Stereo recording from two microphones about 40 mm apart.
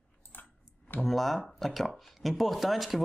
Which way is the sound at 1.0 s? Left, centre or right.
Centre.